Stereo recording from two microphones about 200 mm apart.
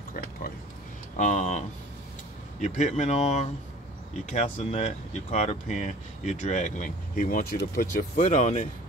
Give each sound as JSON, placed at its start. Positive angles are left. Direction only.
{"t": 1.1, "sound": "speech", "side_deg": 35}
{"t": 2.6, "sound": "speech", "side_deg": 35}